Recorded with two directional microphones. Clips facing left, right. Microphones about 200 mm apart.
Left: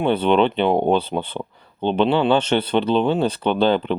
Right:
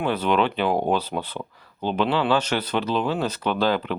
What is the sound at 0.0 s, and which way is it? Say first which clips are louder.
Speech: left 5 dB; 30° left (ahead or behind).